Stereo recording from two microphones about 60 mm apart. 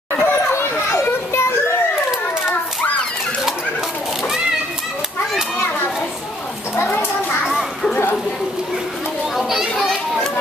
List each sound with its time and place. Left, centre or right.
0.2 s children playing: left
6.8 s children playing: left
9.4 s children playing: centre